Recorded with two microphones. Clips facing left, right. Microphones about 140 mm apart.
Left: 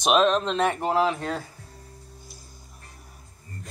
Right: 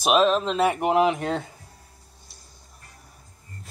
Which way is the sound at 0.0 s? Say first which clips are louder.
Right 1 dB; 5° right (ahead or behind).